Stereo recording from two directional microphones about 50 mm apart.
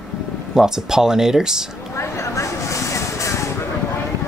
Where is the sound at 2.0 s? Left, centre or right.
Left.